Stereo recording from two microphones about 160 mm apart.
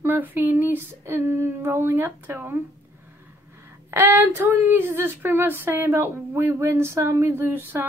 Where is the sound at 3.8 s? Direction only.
15° right (ahead or behind).